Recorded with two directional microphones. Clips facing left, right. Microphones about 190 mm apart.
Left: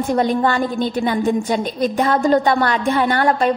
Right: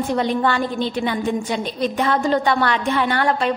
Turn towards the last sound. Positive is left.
turn(degrees=45)  # may be behind; listen again after turning